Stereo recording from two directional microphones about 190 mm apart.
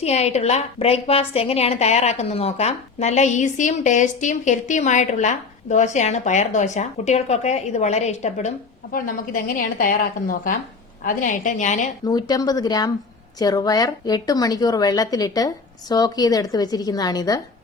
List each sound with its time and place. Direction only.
0.0 s a woman's voice: 35° left (ahead or behind)
12.0 s a woman's voice: 20° left (ahead or behind)